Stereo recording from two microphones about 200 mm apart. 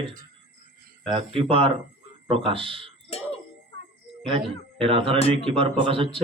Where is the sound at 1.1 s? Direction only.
30° right (ahead or behind).